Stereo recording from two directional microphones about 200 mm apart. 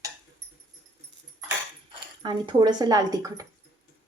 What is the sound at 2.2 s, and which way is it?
Speech, 20° right (ahead or behind).